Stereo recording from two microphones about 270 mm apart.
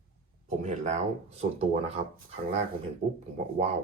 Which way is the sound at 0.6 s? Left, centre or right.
Right.